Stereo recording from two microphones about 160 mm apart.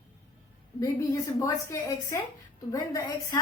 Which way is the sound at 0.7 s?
20° left (ahead or behind).